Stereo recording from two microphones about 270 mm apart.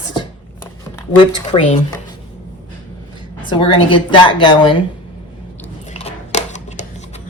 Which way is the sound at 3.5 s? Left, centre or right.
Centre.